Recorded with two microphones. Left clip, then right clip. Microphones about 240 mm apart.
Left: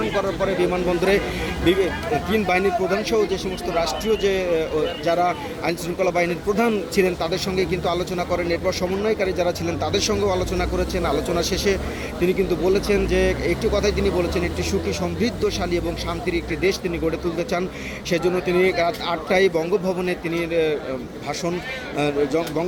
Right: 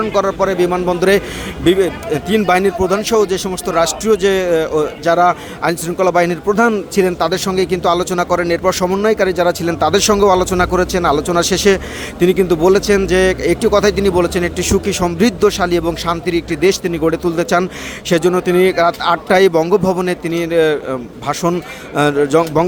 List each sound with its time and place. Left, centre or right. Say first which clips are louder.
0.1 s a man's voice: right 7 dB; right
21.9 s a man's voice: right 9 dB; right